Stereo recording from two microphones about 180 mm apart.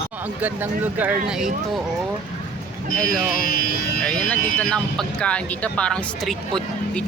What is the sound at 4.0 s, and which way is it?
Speech, 5° left (ahead or behind).